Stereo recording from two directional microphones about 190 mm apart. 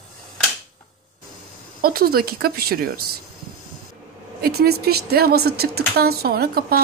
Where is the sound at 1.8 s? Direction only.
55° right (ahead or behind).